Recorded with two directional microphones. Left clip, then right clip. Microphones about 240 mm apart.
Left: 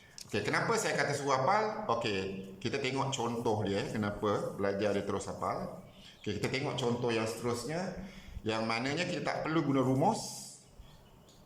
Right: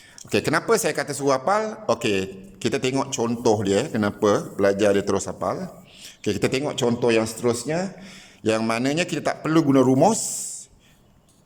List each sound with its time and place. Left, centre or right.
0.3 s a man's voice: right